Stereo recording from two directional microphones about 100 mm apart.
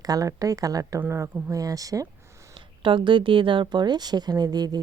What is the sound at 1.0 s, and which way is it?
Speech, 25° right (ahead or behind).